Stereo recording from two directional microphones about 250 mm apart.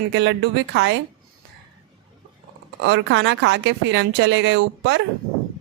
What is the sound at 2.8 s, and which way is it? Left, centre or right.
Speech, right.